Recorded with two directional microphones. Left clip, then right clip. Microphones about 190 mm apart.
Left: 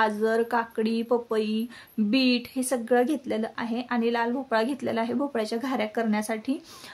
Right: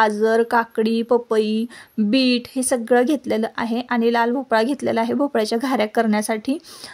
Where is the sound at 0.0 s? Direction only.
35° right (ahead or behind).